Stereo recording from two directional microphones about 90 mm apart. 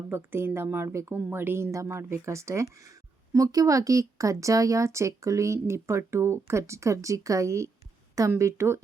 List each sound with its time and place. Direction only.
0.1 s a woman's voice: 25° right (ahead or behind)